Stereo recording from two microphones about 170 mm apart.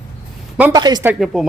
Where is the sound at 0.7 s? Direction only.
25° right (ahead or behind).